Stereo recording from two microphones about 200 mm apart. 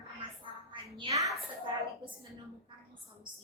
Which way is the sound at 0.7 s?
25° right (ahead or behind).